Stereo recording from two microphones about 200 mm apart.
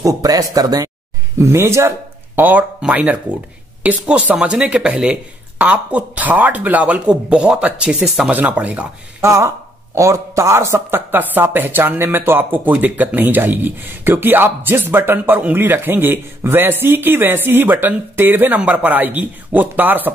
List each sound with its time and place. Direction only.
0.0 s speech: 20° right (ahead or behind)